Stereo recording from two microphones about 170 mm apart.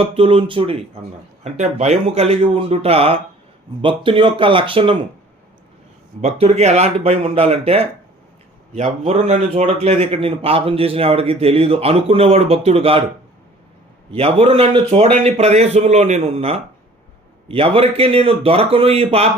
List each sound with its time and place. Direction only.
0.0 s a man's voice: 35° right (ahead or behind)
6.2 s a man's voice: 40° right (ahead or behind)
14.1 s a man's voice: 35° right (ahead or behind)